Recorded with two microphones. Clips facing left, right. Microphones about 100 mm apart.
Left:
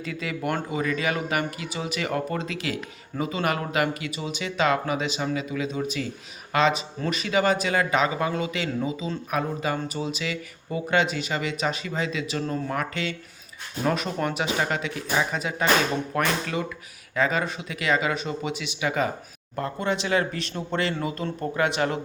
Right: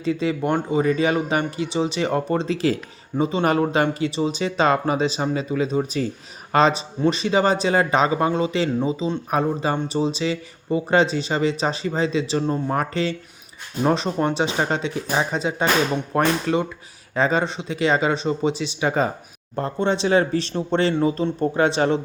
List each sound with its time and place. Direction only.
0.0 s a man's voice: 25° right (ahead or behind)